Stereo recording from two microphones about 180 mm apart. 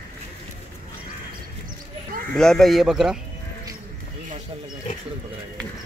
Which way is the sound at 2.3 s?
5° left (ahead or behind).